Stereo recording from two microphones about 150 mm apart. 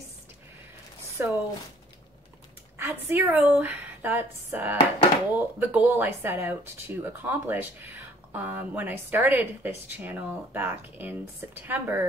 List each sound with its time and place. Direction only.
1.1 s speech: 15° right (ahead or behind)
2.8 s speech: 15° right (ahead or behind)